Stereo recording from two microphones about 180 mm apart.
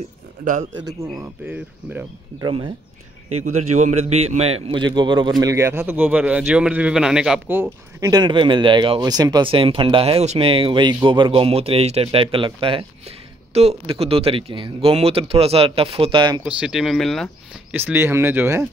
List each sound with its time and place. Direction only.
1.2 s speech: 10° right (ahead or behind)
2.4 s a man's voice: 25° right (ahead or behind)
3.8 s a man's voice: 40° right (ahead or behind)
16.4 s speech: 5° right (ahead or behind)
17.7 s speech: 10° right (ahead or behind)